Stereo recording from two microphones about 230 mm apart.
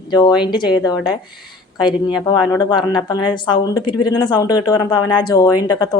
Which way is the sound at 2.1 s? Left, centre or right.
Centre.